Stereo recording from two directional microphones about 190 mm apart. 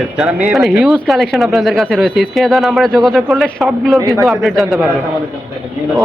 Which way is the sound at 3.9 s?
15° right (ahead or behind).